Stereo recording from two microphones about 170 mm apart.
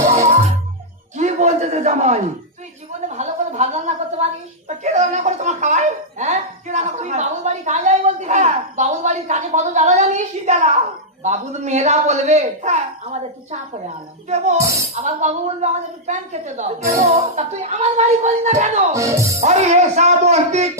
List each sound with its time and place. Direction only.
1.1 s a sound: 45° right (ahead or behind)
3.1 s a woman's voice: 45° right (ahead or behind)
14.9 s a man's voice: 40° right (ahead or behind)
18.9 s speech: 20° right (ahead or behind)
19.4 s speech: 40° right (ahead or behind)